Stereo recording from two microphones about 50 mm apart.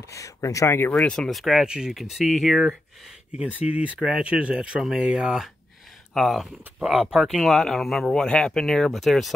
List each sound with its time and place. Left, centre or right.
0.1 s speech: left
0.9 s speech: centre
1.3 s speech: centre
1.7 s speech: centre
2.0 s speech: centre
3.5 s speech: right; by 8.1 s centre
8.1 s speech: centre